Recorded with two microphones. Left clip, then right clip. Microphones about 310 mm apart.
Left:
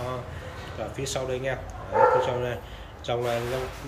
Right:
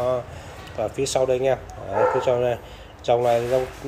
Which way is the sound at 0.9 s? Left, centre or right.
Centre.